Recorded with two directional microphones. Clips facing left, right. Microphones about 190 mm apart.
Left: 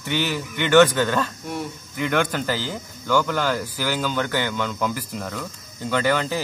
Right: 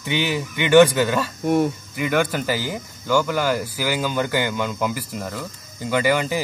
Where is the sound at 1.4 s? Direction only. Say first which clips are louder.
Right 11 dB; 55° right (ahead or behind).